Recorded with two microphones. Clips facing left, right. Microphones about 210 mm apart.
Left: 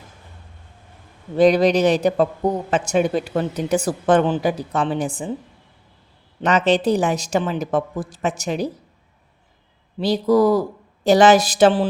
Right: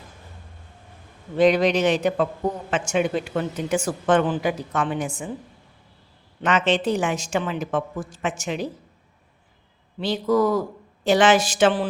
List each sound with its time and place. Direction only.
1.4 s speech: 35° left (ahead or behind)
6.4 s speech: 40° left (ahead or behind)
10.0 s speech: 35° left (ahead or behind)